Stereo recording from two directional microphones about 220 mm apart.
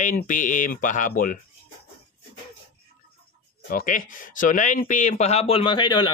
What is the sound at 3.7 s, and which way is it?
Speech, 40° left (ahead or behind).